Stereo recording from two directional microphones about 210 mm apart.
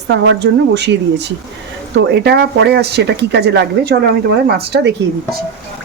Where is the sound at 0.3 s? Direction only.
55° right (ahead or behind).